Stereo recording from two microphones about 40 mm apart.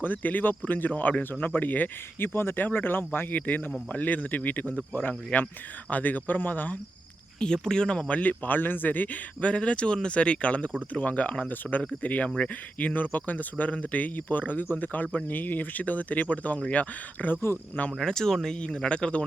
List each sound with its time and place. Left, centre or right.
0.0 s speech: left
2.1 s speech: left
2.6 s speech: left
7.3 s speech: centre; by 9.0 s left
9.4 s speech: left
18.0 s speech: centre
18.6 s speech: left